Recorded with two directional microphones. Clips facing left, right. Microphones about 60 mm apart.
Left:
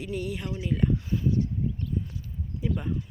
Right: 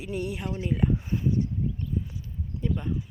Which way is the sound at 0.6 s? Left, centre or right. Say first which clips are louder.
Even; centre.